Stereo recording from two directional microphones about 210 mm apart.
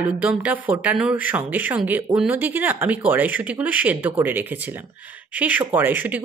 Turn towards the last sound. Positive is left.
turn(degrees=-10)  # may be behind; listen again after turning